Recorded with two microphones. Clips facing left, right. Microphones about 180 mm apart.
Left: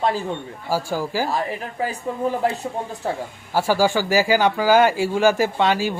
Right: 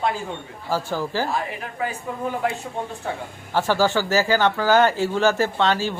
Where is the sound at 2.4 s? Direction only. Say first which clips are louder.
Left 1 dB; 35° left (ahead or behind).